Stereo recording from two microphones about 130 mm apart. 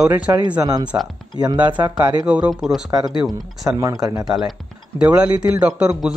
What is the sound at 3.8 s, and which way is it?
Speech, 25° right (ahead or behind).